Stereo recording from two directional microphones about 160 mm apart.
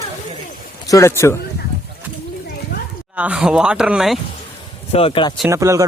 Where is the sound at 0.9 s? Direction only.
15° left (ahead or behind).